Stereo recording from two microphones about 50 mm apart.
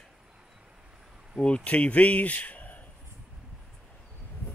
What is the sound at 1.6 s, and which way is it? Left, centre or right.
Speech, left.